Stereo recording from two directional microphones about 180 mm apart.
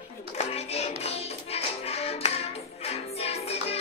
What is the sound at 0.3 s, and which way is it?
Music, 35° left (ahead or behind).